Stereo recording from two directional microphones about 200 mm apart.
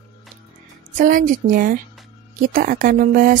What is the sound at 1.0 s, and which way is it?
A woman's voice, 40° right (ahead or behind).